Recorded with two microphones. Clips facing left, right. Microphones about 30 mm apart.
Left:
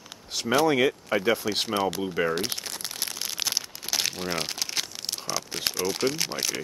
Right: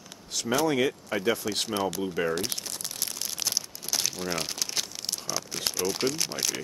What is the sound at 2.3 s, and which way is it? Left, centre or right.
Speech, left.